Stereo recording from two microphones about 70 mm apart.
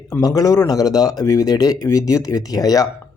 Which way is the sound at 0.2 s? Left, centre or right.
Left.